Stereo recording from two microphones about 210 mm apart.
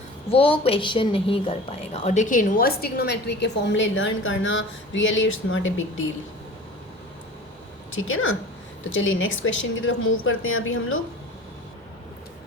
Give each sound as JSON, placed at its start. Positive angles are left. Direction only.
{"t": 0.3, "sound": "a woman's voice", "side_deg": 25}
{"t": 7.9, "sound": "a woman's voice", "side_deg": 70}